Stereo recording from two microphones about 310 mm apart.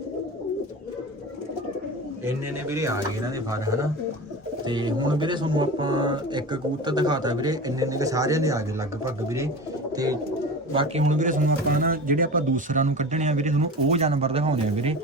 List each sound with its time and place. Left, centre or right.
2.2 s speech: centre
10.7 s speech: centre